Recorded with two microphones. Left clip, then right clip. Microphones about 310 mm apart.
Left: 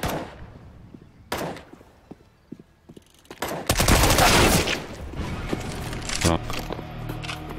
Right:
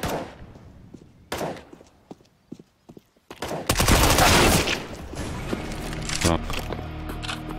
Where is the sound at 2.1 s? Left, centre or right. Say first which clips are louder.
Right 2 dB; centre.